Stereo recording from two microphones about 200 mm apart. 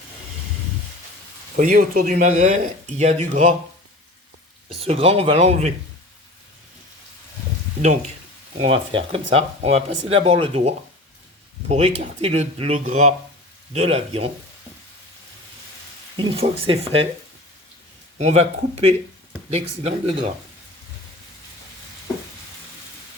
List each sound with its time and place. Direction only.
1.5 s speech: 45° right (ahead or behind)
4.8 s speech: 30° right (ahead or behind)
8.5 s speech: 30° right (ahead or behind)
16.1 s speech: 25° right (ahead or behind)
18.2 s speech: 30° right (ahead or behind)